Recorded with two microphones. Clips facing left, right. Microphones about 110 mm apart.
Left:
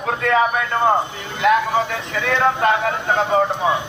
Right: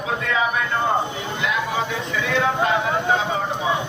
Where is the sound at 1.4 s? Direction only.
55° left (ahead or behind).